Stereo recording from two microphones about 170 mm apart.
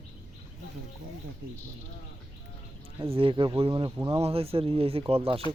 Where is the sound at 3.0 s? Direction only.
30° right (ahead or behind).